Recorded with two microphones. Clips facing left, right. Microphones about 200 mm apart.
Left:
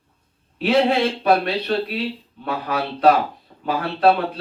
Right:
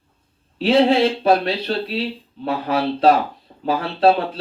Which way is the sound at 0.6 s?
30° right (ahead or behind).